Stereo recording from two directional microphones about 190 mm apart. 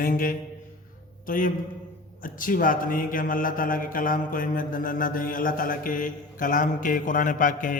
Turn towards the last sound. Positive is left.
turn(degrees=45)  # may be behind; listen again after turning